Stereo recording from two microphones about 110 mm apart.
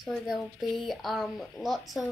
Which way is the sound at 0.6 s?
Centre (ahead or behind).